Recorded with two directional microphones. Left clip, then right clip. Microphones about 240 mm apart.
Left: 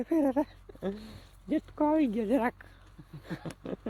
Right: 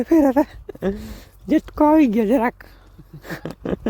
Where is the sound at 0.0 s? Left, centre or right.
Right.